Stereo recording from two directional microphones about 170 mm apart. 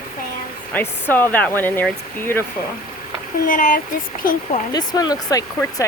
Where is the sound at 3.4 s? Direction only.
50° left (ahead or behind).